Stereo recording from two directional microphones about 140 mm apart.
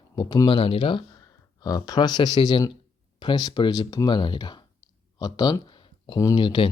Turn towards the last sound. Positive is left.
turn(degrees=35)  # may be behind; listen again after turning